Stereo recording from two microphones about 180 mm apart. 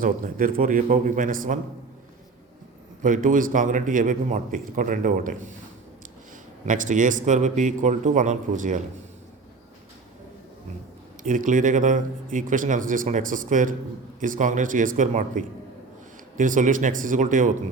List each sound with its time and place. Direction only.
0.0 s a man's voice: 50° right (ahead or behind)
3.0 s a man's voice: 45° right (ahead or behind)
6.7 s a man's voice: 45° right (ahead or behind)
11.2 s a man's voice: 45° right (ahead or behind)